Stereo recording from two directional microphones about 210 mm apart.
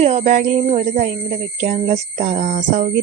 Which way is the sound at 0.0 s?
30° right (ahead or behind).